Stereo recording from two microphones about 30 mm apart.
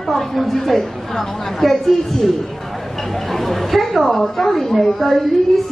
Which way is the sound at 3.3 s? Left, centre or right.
Centre.